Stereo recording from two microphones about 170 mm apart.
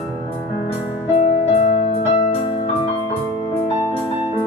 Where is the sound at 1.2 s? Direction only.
45° left (ahead or behind).